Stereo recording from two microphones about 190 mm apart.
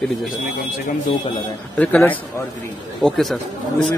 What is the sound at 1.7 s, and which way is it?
A man's voice, 10° left (ahead or behind).